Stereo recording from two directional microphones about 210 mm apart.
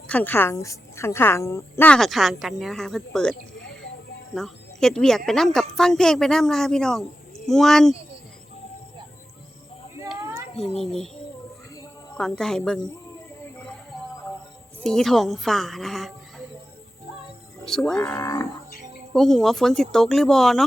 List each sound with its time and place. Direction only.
0.1 s a woman's voice: 10° left (ahead or behind)
3.6 s a sound: 60° left (ahead or behind)
4.4 s a woman's voice: centre (ahead or behind)
10.5 s a woman's voice: 5° left (ahead or behind)
12.1 s a woman's voice: 5° left (ahead or behind)
14.8 s a woman's voice: centre (ahead or behind)
17.7 s a woman's voice: 5° left (ahead or behind)
19.1 s a woman's voice: centre (ahead or behind)